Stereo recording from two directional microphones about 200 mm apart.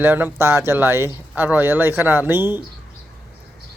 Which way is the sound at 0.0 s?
10° right (ahead or behind).